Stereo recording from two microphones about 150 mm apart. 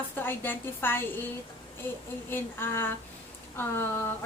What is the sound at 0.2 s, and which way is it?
A woman's voice, 15° left (ahead or behind).